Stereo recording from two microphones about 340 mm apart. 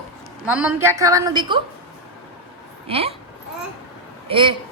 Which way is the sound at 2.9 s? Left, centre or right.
Centre.